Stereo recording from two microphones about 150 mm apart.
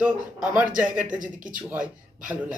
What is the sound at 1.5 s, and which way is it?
Speech, 10° right (ahead or behind).